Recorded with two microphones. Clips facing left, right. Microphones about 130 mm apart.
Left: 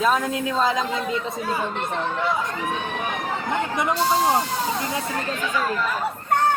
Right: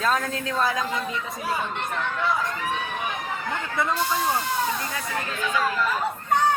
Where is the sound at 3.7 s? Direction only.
20° left (ahead or behind).